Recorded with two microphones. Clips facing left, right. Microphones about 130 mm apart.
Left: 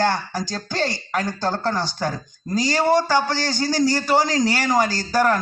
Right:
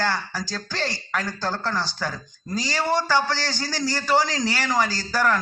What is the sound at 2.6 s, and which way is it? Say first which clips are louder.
Speech: left 6 dB; 45° left (ahead or behind).